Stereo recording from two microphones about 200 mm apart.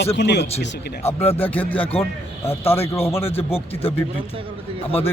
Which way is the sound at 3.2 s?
30° left (ahead or behind).